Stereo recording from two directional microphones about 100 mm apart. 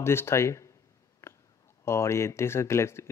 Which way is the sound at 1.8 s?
25° left (ahead or behind).